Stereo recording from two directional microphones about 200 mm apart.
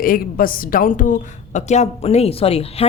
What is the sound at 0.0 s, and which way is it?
A woman's voice, 45° left (ahead or behind).